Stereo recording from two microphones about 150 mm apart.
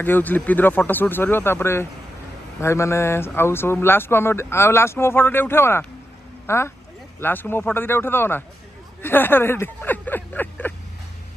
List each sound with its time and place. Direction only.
0.0 s speech: 10° left (ahead or behind)